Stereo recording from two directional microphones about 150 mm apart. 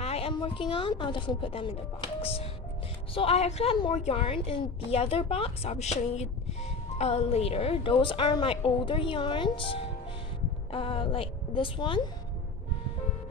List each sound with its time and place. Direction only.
0.0 s a woman's voice: 40° left (ahead or behind)
3.2 s a woman's voice: 45° left (ahead or behind)